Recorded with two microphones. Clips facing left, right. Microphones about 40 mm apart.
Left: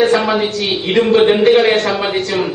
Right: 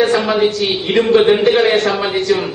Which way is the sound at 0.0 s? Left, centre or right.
Centre.